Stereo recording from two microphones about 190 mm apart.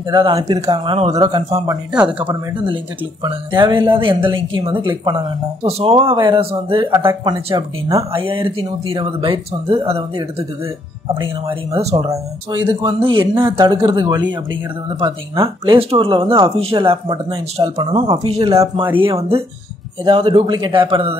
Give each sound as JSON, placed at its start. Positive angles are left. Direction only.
{"t": 0.1, "sound": "speech", "side_deg": -25}
{"t": 3.3, "sound": "speech", "side_deg": -25}
{"t": 11.1, "sound": "speech", "side_deg": -30}
{"t": 12.1, "sound": "speech", "side_deg": -25}
{"t": 18.5, "sound": "speech", "side_deg": -15}
{"t": 18.9, "sound": "speech", "side_deg": -30}